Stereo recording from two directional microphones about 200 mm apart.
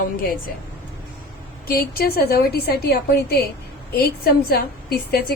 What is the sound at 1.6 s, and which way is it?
A woman's voice, 50° left (ahead or behind).